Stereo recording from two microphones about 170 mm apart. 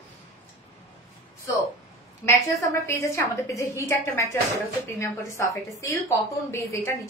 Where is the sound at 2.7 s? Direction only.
15° left (ahead or behind).